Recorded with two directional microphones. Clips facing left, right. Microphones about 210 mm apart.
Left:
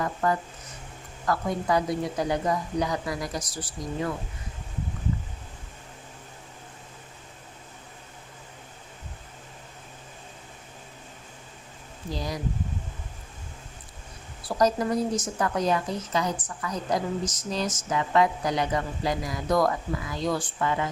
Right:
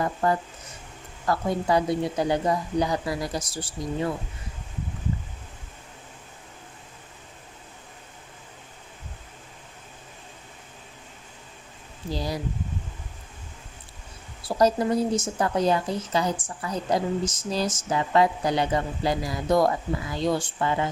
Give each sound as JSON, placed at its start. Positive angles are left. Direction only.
{"t": 0.0, "sound": "a woman's voice", "side_deg": -30}
{"t": 12.1, "sound": "speech", "side_deg": -30}
{"t": 14.4, "sound": "a woman's voice", "side_deg": -25}